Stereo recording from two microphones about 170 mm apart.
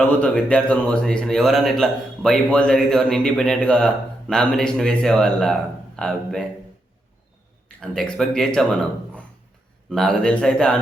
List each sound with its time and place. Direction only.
0.0 s speech: 10° left (ahead or behind)
7.8 s speech: 5° left (ahead or behind)